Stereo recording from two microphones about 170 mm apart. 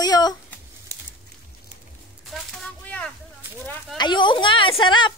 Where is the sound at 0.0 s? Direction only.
25° left (ahead or behind).